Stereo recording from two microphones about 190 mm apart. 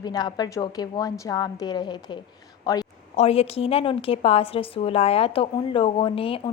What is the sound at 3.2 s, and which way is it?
A woman's voice, 30° left (ahead or behind).